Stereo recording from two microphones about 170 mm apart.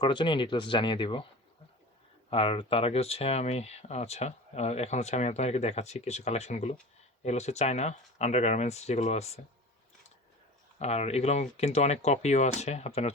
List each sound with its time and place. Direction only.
0.0 s speech: 30° left (ahead or behind)
2.3 s speech: 35° left (ahead or behind)
10.8 s speech: 40° left (ahead or behind)